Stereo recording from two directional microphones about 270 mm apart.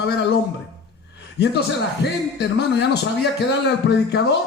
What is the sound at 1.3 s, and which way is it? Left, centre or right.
A man's voice, left.